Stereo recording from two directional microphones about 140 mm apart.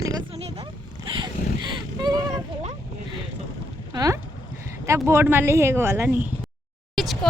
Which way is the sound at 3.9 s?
25° right (ahead or behind).